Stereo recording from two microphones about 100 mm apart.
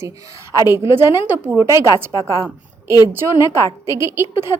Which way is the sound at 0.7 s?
25° right (ahead or behind).